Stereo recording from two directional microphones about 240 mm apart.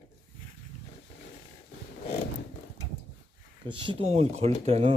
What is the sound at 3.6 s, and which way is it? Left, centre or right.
Speech, centre.